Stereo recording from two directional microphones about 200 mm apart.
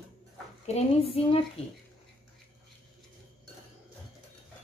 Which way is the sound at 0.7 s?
30° left (ahead or behind).